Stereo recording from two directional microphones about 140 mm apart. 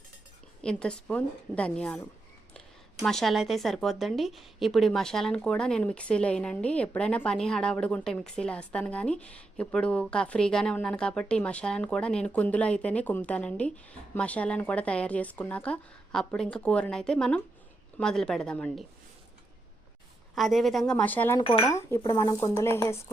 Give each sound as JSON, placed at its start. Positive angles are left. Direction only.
{"t": 0.6, "sound": "speech", "side_deg": 5}
{"t": 3.0, "sound": "speech", "side_deg": 5}
{"t": 20.3, "sound": "speech", "side_deg": 0}